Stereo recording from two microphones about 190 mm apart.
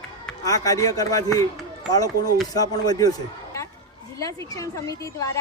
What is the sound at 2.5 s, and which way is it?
Speech, 20° left (ahead or behind).